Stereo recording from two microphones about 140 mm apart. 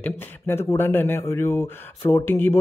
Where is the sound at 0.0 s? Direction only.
15° left (ahead or behind).